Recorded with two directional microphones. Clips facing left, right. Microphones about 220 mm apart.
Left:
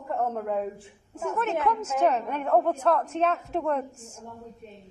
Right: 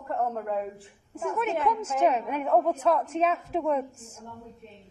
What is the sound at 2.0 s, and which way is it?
A woman's voice, 5° right (ahead or behind).